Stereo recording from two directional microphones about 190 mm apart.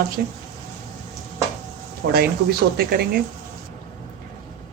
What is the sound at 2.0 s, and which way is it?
Speech, 55° right (ahead or behind).